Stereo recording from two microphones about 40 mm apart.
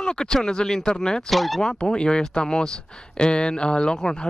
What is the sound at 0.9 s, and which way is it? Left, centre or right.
Speech, centre.